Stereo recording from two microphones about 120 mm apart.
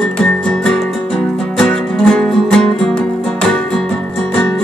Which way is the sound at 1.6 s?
5° left (ahead or behind).